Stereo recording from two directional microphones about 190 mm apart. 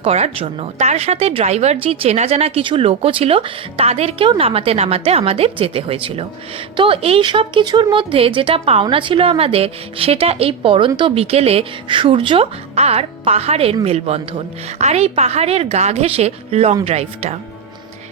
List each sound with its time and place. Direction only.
0.0 s a woman's voice: 30° right (ahead or behind)